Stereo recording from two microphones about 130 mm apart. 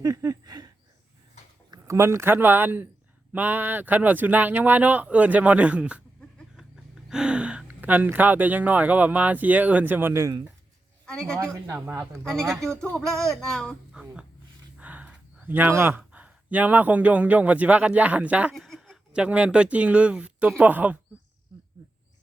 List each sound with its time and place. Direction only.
0.0 s a sound: 30° right (ahead or behind)
1.7 s speech: 20° right (ahead or behind)
7.1 s speech: 5° right (ahead or behind); by 10.4 s 20° right (ahead or behind)
11.0 s speech: 5° left (ahead or behind)
11.7 s speech: 15° right (ahead or behind)
12.2 s a sound: 5° left (ahead or behind)
14.8 s speech: 10° right (ahead or behind)
18.5 s speech: centre (ahead or behind)